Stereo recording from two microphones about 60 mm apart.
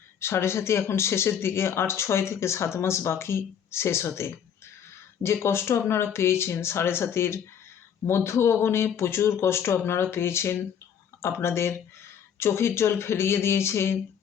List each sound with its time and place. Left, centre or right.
0.2 s speech: left